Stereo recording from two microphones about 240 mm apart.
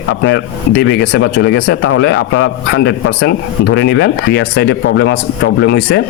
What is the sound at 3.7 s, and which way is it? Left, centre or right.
Speech, left.